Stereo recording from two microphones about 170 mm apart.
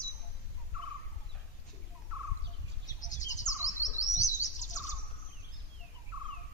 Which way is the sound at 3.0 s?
45° left (ahead or behind).